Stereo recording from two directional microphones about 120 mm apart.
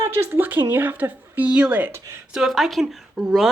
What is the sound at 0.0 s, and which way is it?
Speech, 20° right (ahead or behind).